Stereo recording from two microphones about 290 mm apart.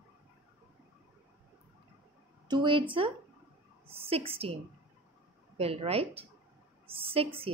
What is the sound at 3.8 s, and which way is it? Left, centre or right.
Speech, centre.